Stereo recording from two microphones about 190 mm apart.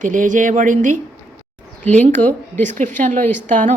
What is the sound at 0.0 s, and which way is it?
A woman's voice, 45° right (ahead or behind).